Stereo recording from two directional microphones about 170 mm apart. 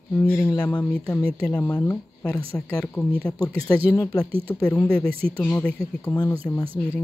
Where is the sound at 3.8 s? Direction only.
20° left (ahead or behind).